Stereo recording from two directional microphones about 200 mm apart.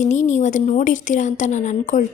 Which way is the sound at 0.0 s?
35° left (ahead or behind).